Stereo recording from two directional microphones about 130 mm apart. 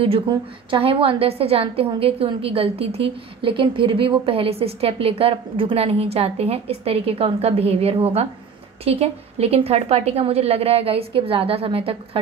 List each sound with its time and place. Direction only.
0.7 s a woman's voice: 45° right (ahead or behind)